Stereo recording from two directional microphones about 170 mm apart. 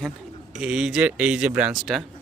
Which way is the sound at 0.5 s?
Centre (ahead or behind).